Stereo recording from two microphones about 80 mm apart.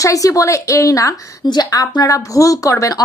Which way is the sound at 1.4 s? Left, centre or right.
Left.